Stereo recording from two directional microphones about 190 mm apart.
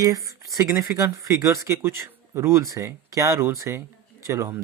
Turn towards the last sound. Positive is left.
turn(degrees=-15)  # may be behind; listen again after turning